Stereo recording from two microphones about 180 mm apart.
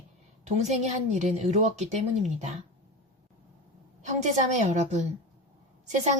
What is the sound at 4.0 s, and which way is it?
A woman's voice, 40° right (ahead or behind).